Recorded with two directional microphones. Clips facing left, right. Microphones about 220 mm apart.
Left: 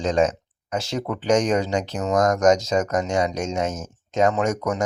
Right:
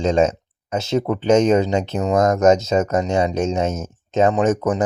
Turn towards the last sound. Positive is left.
turn(degrees=-30)  # may be behind; listen again after turning